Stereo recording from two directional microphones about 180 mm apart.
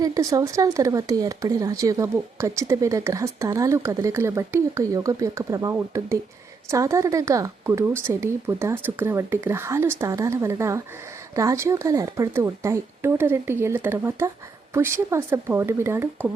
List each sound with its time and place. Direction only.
0.0 s speech: 20° right (ahead or behind)